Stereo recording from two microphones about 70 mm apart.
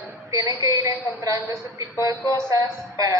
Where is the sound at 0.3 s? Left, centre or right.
Right.